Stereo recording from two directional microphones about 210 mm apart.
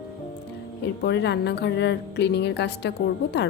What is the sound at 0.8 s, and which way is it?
A woman's voice, 55° left (ahead or behind).